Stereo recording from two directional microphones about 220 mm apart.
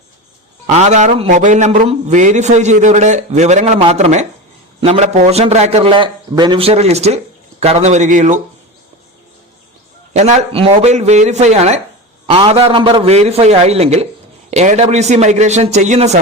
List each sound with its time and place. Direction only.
0.7 s a man's voice: 30° right (ahead or behind)
10.1 s a man's voice: 30° right (ahead or behind)